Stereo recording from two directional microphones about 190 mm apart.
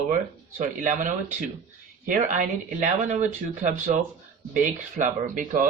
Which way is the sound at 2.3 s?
45° right (ahead or behind).